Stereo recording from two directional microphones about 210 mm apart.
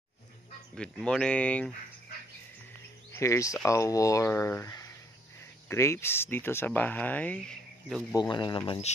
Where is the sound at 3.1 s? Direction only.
15° left (ahead or behind).